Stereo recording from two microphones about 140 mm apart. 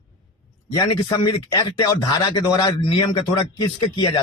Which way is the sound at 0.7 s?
30° left (ahead or behind).